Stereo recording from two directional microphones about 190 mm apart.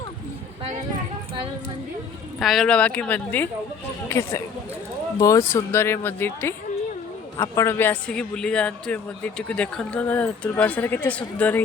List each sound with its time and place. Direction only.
2.4 s a man's voice: centre (ahead or behind)